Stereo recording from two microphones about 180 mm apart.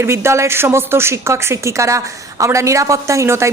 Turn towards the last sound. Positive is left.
turn(degrees=-15)  # may be behind; listen again after turning